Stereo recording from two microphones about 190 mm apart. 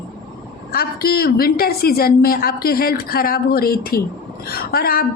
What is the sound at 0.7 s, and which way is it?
A woman's voice, 50° left (ahead or behind).